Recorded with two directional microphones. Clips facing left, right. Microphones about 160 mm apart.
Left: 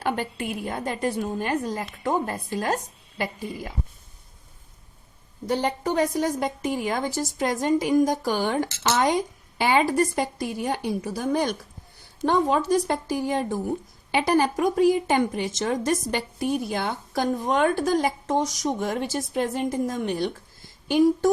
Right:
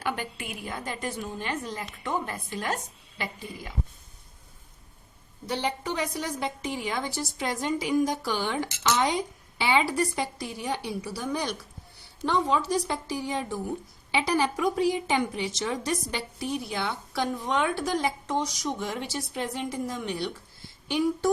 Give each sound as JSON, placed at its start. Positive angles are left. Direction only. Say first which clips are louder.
{"t": 0.0, "sound": "speech", "louder": "left 5 dB", "side_deg": 30}
{"t": 5.5, "sound": "a woman's voice", "louder": "left 5 dB", "side_deg": 45}